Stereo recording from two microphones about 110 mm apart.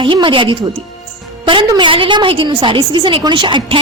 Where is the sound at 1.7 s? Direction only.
45° right (ahead or behind).